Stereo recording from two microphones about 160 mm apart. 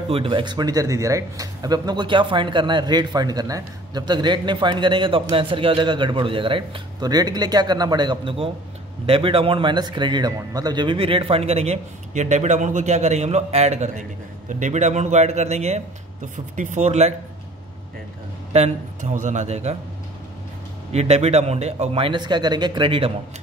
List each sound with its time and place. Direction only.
0.1 s a man's voice: 30° right (ahead or behind)
18.5 s a man's voice: 45° right (ahead or behind)
20.9 s a man's voice: 40° right (ahead or behind)